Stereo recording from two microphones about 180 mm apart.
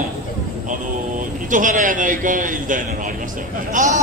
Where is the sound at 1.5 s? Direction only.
45° right (ahead or behind).